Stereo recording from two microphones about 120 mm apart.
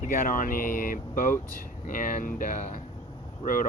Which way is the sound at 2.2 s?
90° left.